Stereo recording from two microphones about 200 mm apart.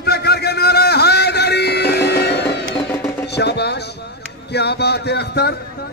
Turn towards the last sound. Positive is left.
turn(degrees=55)  # may be behind; listen again after turning